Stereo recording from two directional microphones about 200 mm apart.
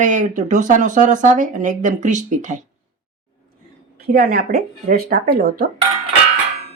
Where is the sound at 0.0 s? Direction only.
40° right (ahead or behind).